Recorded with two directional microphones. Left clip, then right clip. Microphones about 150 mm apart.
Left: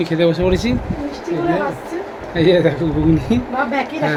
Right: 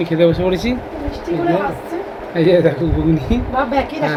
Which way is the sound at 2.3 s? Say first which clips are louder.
Right 1 dB; 15° left (ahead or behind).